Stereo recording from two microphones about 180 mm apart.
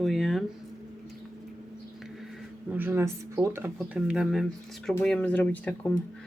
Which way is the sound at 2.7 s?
10° right (ahead or behind).